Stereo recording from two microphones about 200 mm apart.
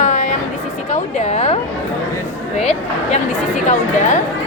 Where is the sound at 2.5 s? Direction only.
35° left (ahead or behind).